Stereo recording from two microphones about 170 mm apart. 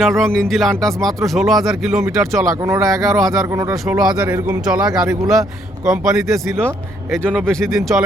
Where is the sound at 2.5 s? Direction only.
20° right (ahead or behind).